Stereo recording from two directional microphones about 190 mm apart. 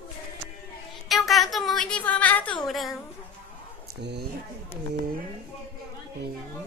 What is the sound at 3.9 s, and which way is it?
Speech, 60° right (ahead or behind).